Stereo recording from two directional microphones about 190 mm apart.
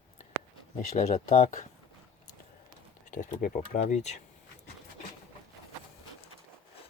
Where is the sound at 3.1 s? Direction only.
40° left (ahead or behind).